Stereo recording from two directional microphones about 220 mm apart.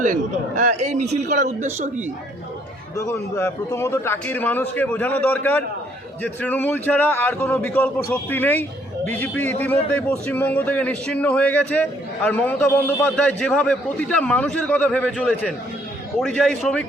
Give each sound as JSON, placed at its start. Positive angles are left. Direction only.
{"t": 0.0, "sound": "a man's voice", "side_deg": -35}
{"t": 2.9, "sound": "a man's voice", "side_deg": 15}